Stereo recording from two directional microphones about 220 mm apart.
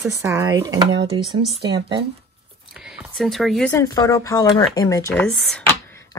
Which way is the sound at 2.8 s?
Centre (ahead or behind).